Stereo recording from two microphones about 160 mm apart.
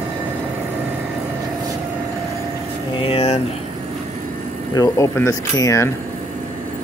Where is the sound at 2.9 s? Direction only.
35° left (ahead or behind).